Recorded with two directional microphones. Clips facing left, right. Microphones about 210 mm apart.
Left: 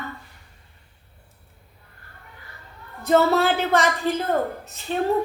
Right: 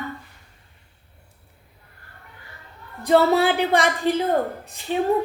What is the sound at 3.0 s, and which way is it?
A woman's voice, 15° right (ahead or behind).